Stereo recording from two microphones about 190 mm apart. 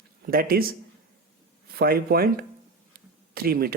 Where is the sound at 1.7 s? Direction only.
55° right (ahead or behind).